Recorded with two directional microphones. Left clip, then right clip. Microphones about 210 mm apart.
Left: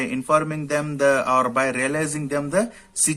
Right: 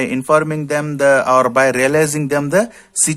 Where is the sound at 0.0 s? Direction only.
40° right (ahead or behind).